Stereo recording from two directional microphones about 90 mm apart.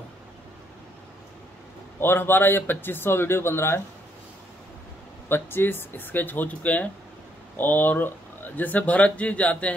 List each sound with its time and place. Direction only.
2.0 s speech: 25° left (ahead or behind)
5.3 s a man's voice: 25° left (ahead or behind)